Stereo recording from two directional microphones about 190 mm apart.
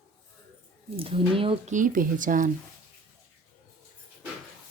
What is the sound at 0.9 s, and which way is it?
Speech, 30° right (ahead or behind).